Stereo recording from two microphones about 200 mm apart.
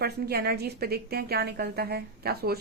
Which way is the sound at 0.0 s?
50° right (ahead or behind).